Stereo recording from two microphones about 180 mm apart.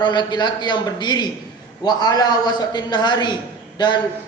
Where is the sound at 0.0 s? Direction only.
25° left (ahead or behind).